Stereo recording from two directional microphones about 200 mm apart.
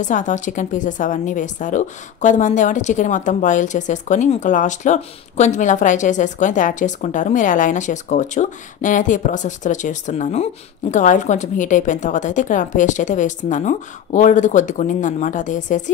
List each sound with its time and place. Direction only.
0.0 s speech: 40° left (ahead or behind)